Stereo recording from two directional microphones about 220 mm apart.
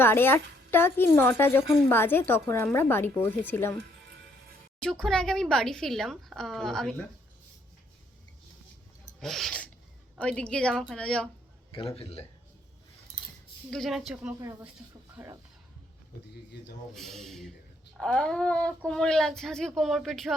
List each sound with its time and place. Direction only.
0.0 s a woman's voice: 10° left (ahead or behind)
4.8 s speech: 5° left (ahead or behind)
9.2 s speech: centre (ahead or behind)
11.7 s speech: 25° left (ahead or behind)
13.7 s speech: centre (ahead or behind)
16.9 s speech: centre (ahead or behind)